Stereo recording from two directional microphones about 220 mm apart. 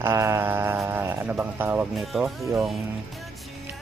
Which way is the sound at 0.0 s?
10° right (ahead or behind).